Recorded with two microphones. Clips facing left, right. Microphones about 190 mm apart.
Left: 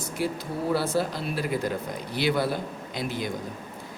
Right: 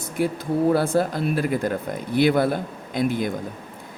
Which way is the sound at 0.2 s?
50° right (ahead or behind).